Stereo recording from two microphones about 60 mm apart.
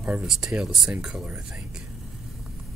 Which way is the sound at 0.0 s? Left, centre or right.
Centre.